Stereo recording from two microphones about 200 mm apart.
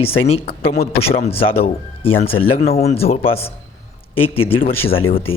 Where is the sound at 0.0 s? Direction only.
30° left (ahead or behind).